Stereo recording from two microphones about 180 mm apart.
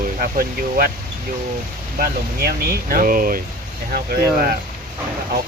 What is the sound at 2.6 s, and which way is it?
Speech, 50° right (ahead or behind).